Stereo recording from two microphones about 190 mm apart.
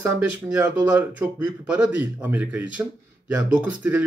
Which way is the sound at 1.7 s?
10° right (ahead or behind).